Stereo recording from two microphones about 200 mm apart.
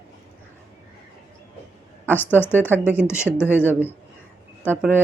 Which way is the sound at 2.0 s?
10° left (ahead or behind).